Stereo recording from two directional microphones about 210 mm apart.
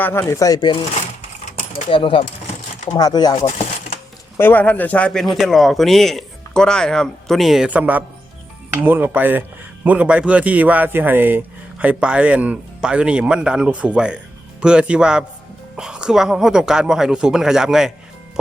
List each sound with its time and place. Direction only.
0.0 s speech: 10° left (ahead or behind)
1.5 s speech: 30° left (ahead or behind); by 17.9 s centre (ahead or behind)